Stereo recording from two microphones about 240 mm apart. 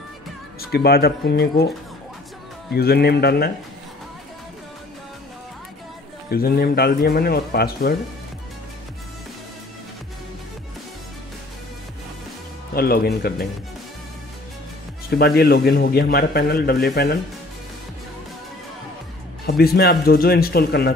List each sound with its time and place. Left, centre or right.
0.6 s a man's voice: left
2.7 s a man's voice: left
6.3 s a man's voice: left
12.7 s a man's voice: left
15.0 s a man's voice: left
19.4 s a man's voice: left